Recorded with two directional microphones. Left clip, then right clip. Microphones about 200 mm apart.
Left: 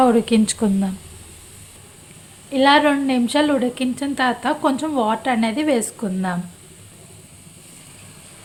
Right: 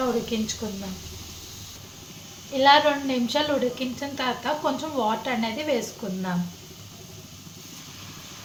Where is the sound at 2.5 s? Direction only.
45° left (ahead or behind).